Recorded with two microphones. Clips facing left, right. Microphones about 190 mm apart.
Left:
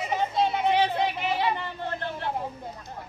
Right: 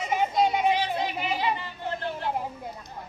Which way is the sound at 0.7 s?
60° left (ahead or behind).